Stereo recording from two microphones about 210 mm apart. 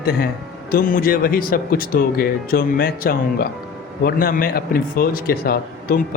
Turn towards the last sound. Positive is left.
turn(degrees=45)  # may be behind; listen again after turning